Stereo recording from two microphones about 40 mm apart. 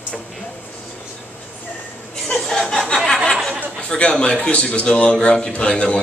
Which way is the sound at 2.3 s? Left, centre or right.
Centre.